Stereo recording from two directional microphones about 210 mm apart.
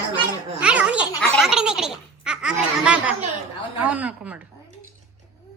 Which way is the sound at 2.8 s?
5° right (ahead or behind).